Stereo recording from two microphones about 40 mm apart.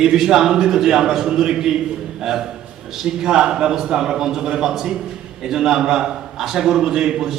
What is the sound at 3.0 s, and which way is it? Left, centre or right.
A man's voice, centre.